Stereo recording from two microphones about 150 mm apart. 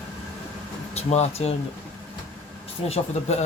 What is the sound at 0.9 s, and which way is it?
Speech, 45° left (ahead or behind).